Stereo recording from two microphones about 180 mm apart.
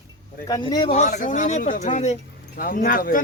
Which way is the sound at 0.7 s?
25° left (ahead or behind).